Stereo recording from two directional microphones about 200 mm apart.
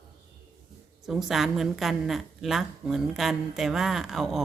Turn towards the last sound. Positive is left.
turn(degrees=0)  # may be behind; listen again after turning